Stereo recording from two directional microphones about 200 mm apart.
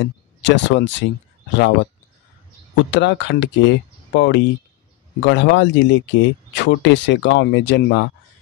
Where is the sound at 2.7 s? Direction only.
65° left (ahead or behind).